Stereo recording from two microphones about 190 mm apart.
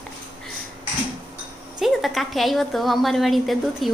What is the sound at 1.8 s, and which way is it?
A woman's voice, centre (ahead or behind).